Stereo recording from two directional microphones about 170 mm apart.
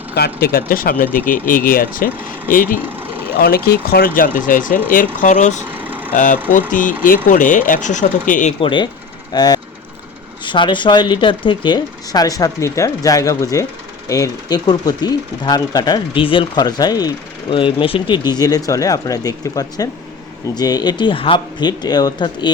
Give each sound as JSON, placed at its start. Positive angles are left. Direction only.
{"t": 0.1, "sound": "speech", "side_deg": 70}
{"t": 5.6, "sound": "vehicle", "side_deg": -10}
{"t": 6.1, "sound": "speech", "side_deg": 50}
{"t": 8.6, "sound": "speech", "side_deg": 30}